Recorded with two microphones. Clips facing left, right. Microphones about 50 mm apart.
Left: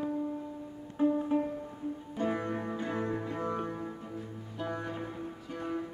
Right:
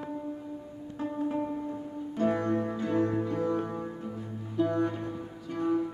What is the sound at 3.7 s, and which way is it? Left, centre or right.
Music, centre.